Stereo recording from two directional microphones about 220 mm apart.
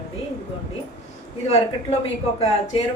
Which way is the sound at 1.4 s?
30° left (ahead or behind).